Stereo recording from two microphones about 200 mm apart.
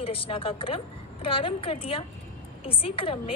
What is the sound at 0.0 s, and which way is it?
A woman's voice, 25° left (ahead or behind).